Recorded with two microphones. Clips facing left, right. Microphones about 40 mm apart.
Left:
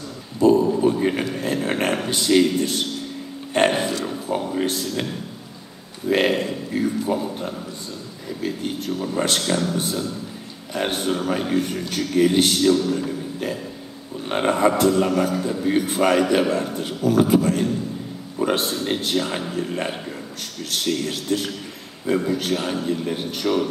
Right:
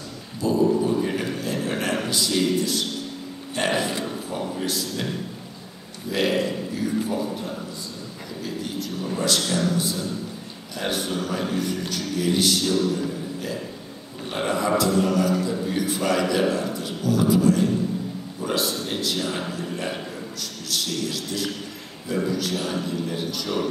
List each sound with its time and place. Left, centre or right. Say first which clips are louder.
0.4 s a sound: left 4 dB; left
2.0 s a man's voice: left 7 dB; left
6.0 s a man's voice: left 3 dB; left
14.3 s a man's voice: left 4 dB; left
18.4 s a sound: left 4 dB; left
18.9 s a man's voice: left 3 dB; left